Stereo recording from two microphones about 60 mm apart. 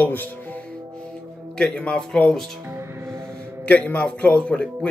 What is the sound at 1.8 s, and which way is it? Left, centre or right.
Speech, centre.